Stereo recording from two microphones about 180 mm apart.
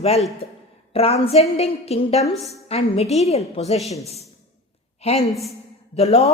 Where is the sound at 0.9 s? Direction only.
35° left (ahead or behind).